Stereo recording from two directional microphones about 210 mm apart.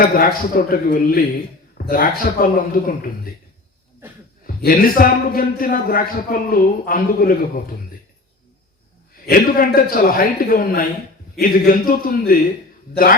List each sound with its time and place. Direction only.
0.0 s a man's voice: 45° left (ahead or behind)
4.4 s a man's voice: 45° left (ahead or behind)
9.2 s a man's voice: 45° left (ahead or behind)